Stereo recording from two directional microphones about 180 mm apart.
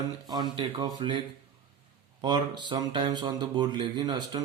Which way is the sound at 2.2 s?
25° right (ahead or behind).